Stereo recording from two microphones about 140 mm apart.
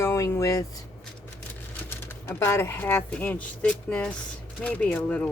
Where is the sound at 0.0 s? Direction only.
20° left (ahead or behind).